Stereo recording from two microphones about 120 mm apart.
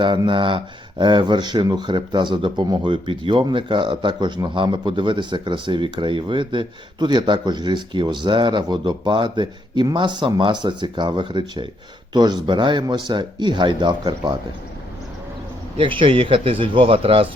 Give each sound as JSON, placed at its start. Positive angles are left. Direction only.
{"t": 0.3, "sound": "speech", "side_deg": -45}
{"t": 15.8, "sound": "speech", "side_deg": -45}